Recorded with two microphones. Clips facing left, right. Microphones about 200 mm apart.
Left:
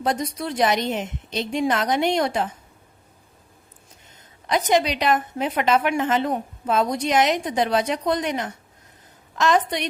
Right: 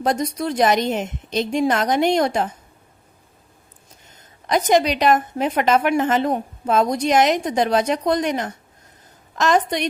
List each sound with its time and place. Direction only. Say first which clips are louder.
0.0 s a woman's voice: right 3 dB; 45° right (ahead or behind)
4.4 s a woman's voice: right 3 dB; 45° right (ahead or behind)